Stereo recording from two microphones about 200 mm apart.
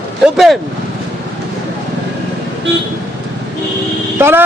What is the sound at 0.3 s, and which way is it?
Speech, centre (ahead or behind).